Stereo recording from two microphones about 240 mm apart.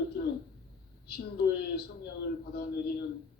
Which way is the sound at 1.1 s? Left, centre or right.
Left.